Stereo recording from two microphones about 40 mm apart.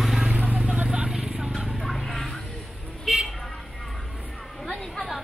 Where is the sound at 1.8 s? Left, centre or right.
Centre.